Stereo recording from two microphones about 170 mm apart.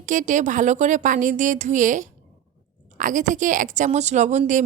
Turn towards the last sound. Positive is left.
turn(degrees=-45)  # may be behind; listen again after turning